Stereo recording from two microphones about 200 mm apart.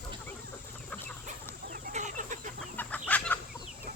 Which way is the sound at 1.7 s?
35° right (ahead or behind).